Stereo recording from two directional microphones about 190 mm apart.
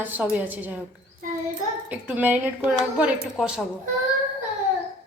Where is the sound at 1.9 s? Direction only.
10° right (ahead or behind).